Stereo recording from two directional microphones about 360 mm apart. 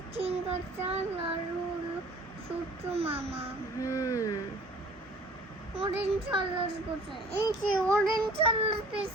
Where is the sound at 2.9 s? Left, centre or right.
Centre.